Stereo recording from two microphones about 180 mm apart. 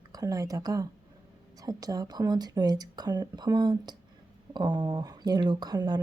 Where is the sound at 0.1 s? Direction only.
20° right (ahead or behind).